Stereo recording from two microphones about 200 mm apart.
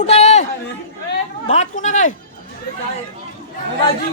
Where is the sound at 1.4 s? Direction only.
35° left (ahead or behind).